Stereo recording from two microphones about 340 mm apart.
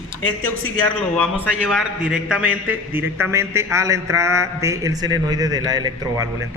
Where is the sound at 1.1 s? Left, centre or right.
Centre.